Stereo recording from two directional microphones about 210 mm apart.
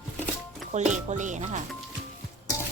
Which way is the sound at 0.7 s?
35° right (ahead or behind).